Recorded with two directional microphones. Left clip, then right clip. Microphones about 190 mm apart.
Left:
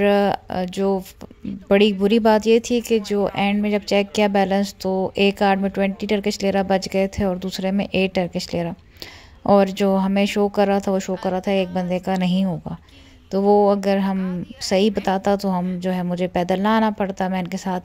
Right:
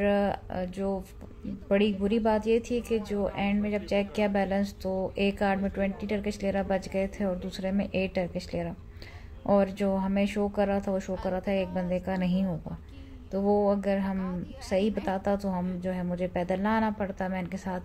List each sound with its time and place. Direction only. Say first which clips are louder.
0.0 s speech: left 9 dB; 45° left (ahead or behind)